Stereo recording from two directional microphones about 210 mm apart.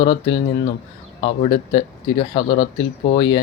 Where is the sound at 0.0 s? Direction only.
20° left (ahead or behind).